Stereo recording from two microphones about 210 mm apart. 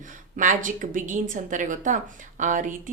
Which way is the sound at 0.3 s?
35° right (ahead or behind).